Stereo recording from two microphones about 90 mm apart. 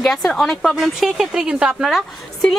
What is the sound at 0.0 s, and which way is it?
A woman's voice, centre (ahead or behind).